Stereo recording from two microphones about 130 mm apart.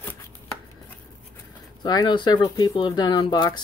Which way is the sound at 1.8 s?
35° left (ahead or behind).